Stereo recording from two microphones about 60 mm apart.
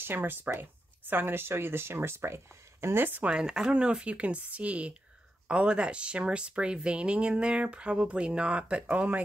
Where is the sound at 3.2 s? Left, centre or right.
Centre.